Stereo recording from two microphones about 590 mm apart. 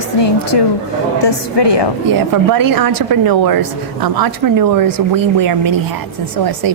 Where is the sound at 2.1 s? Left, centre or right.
Right.